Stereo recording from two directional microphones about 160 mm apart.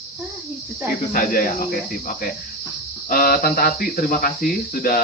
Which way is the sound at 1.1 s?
60° left (ahead or behind).